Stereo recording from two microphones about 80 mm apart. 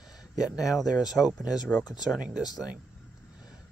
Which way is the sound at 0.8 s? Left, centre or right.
Left.